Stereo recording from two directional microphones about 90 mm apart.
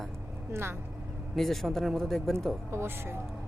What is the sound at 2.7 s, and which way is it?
Speech, 25° right (ahead or behind).